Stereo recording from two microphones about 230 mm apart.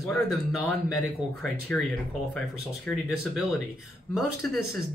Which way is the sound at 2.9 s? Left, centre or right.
Centre.